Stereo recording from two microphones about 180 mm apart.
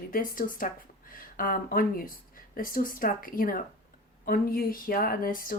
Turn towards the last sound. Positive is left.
turn(degrees=50)  # may be behind; listen again after turning